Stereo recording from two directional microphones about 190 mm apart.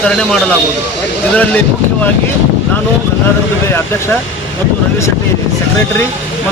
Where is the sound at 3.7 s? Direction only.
10° left (ahead or behind).